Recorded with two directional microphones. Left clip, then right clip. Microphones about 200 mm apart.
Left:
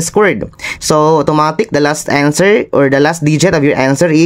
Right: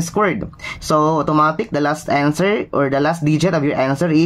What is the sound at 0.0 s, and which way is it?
Speech, 35° left (ahead or behind).